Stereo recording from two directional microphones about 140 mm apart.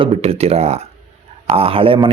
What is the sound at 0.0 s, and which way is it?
Speech, 45° right (ahead or behind).